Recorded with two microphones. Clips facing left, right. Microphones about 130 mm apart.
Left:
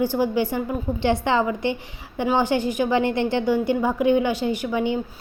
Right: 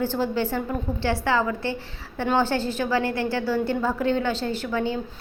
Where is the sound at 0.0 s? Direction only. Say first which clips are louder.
Left 3 dB; 15° left (ahead or behind).